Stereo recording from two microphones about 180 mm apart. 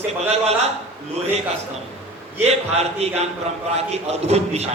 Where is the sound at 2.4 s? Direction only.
35° right (ahead or behind).